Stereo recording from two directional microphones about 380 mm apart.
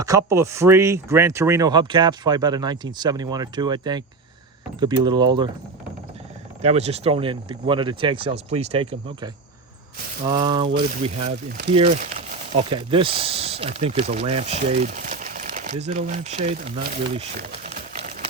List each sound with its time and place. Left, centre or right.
0.0 s speech: centre
6.6 s speech: centre